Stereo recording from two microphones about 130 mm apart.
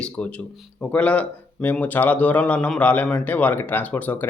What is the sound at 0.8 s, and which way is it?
Speech, 10° left (ahead or behind).